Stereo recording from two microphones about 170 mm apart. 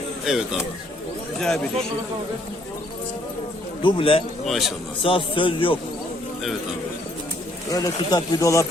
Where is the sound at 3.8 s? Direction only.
30° left (ahead or behind).